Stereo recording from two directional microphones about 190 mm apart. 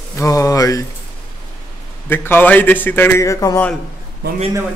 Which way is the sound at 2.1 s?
10° left (ahead or behind).